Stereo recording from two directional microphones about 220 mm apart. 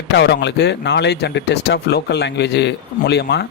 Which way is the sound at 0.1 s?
50° left (ahead or behind).